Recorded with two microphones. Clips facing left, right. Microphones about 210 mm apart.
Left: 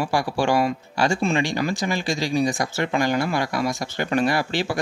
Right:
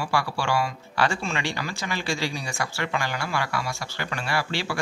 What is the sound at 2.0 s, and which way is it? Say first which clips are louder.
Speech: left 3 dB; 15° left (ahead or behind).